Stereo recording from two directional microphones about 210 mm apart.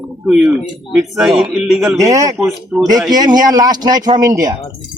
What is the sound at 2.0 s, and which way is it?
Speech, 15° right (ahead or behind).